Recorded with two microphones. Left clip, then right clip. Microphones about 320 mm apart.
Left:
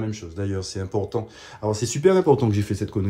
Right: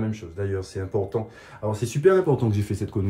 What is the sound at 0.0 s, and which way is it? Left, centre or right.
Speech, left.